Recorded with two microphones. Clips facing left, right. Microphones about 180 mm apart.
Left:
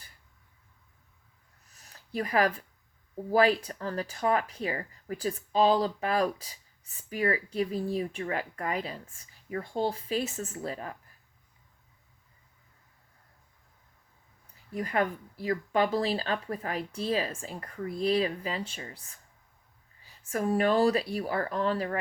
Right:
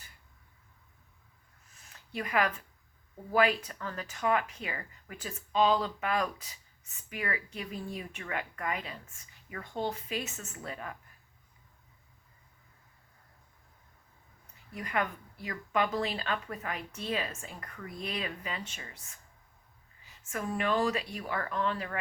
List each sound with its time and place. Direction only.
1.7 s a sound: 40° left (ahead or behind)
3.3 s speech: 35° left (ahead or behind)
14.7 s speech: 35° left (ahead or behind)